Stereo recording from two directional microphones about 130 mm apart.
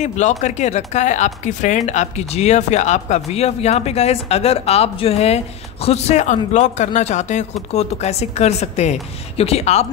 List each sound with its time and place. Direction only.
0.0 s speech: 65° left (ahead or behind)